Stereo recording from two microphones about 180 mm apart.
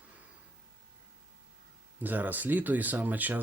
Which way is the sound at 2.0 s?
10° right (ahead or behind).